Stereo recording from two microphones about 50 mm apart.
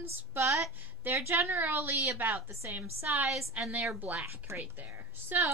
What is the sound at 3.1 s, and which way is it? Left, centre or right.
Female singing, right.